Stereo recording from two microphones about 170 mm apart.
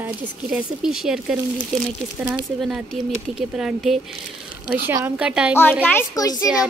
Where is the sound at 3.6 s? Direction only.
5° right (ahead or behind).